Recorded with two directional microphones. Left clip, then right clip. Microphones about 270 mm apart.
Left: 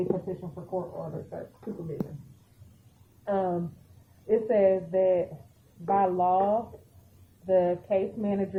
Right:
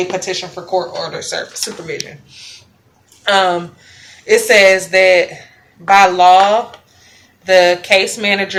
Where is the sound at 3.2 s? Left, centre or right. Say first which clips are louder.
Right 16 dB; right.